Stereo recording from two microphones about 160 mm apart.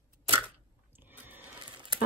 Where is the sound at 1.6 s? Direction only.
30° right (ahead or behind).